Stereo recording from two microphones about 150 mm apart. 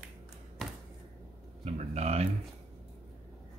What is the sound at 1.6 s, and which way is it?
Speech, 50° right (ahead or behind).